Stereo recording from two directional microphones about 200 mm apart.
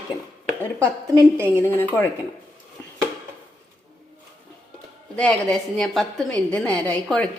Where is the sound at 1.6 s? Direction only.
10° left (ahead or behind).